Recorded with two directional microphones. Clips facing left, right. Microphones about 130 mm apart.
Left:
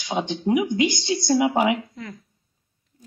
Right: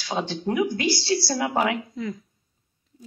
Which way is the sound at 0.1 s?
20° left (ahead or behind).